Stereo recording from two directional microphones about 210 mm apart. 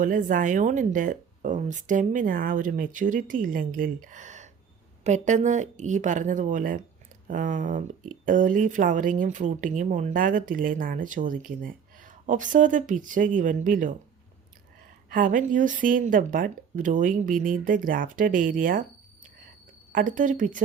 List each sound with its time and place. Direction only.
0.0 s speech: 40° right (ahead or behind)
15.1 s speech: 40° right (ahead or behind)
19.9 s speech: 40° right (ahead or behind)